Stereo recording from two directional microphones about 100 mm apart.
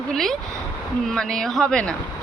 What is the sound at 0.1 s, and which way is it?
A woman's voice, 5° left (ahead or behind).